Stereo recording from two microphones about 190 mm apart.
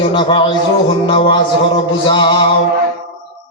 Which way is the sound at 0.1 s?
25° left (ahead or behind).